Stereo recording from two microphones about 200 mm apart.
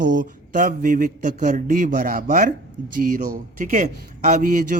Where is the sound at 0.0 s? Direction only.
65° right (ahead or behind).